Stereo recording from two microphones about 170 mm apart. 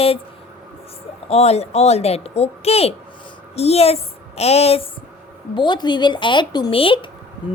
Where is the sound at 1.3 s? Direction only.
40° left (ahead or behind).